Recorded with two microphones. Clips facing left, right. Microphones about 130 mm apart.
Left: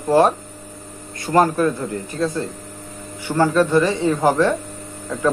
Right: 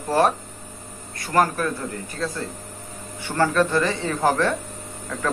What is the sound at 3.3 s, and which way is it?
Speech, 15° left (ahead or behind).